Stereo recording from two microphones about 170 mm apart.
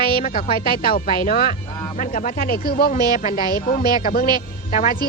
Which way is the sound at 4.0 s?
60° left (ahead or behind).